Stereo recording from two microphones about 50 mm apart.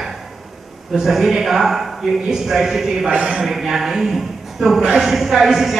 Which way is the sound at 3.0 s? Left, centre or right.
Right.